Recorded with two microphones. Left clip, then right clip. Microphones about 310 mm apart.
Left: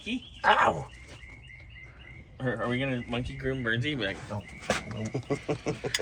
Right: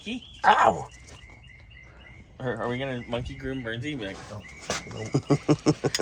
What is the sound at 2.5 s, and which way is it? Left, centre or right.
Speech, right.